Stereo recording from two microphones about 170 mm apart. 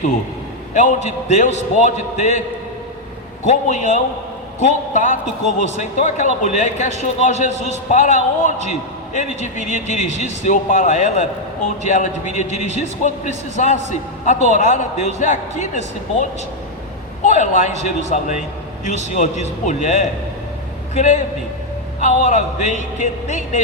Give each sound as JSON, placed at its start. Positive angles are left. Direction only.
{"t": 0.7, "sound": "a man's voice", "side_deg": 45}
{"t": 3.5, "sound": "speech", "side_deg": 45}
{"t": 17.2, "sound": "speech", "side_deg": 45}